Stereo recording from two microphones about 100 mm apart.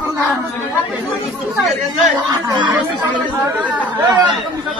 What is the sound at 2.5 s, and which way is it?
Speech, 45° right (ahead or behind).